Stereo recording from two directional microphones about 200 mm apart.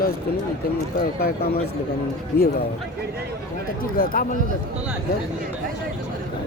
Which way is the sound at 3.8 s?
45° left (ahead or behind).